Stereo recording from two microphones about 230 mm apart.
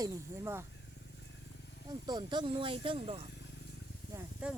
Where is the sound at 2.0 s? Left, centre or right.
Centre.